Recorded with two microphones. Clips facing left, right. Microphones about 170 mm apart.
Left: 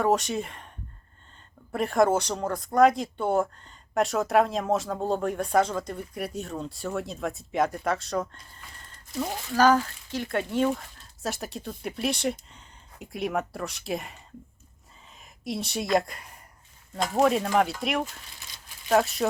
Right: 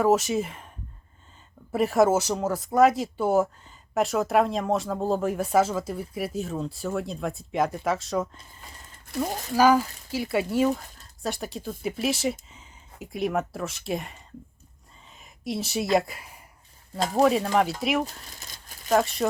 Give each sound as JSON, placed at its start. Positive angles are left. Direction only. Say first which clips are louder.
{"t": 0.0, "sound": "speech", "louder": "right 3 dB", "side_deg": 0}
{"t": 1.7, "sound": "speech", "louder": "right 2 dB", "side_deg": -5}
{"t": 18.0, "sound": "speech", "louder": "right 2 dB", "side_deg": -40}
{"t": 18.9, "sound": "speech", "louder": "even", "side_deg": 0}